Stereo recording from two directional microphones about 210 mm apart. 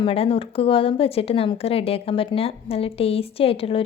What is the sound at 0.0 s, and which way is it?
Speech, 25° left (ahead or behind).